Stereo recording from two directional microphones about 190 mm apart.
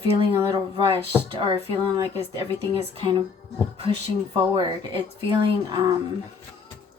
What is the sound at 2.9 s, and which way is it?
Speech, 30° right (ahead or behind).